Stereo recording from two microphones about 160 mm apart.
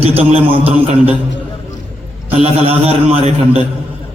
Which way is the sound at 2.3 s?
40° right (ahead or behind).